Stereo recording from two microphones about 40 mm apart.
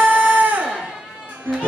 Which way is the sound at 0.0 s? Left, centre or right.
Right.